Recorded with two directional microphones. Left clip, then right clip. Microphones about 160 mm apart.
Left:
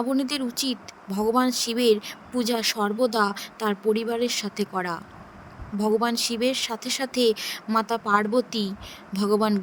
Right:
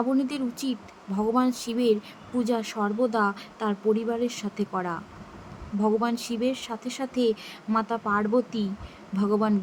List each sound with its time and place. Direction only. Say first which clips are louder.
0.2 s speech: left 2 dB; 55° left (ahead or behind)